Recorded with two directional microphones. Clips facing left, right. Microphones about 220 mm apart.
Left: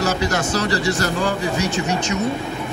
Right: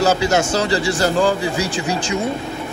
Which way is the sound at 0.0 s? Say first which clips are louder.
Right 4 dB; 30° right (ahead or behind).